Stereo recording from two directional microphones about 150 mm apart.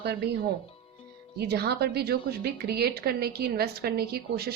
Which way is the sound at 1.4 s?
90° right.